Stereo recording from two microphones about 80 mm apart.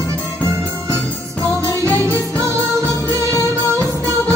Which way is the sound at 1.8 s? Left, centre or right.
Right.